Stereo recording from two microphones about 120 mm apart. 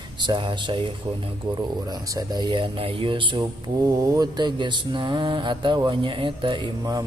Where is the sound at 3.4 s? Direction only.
30° right (ahead or behind).